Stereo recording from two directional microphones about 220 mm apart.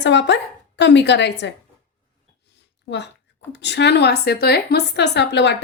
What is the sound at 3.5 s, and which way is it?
A woman's voice, 50° left (ahead or behind).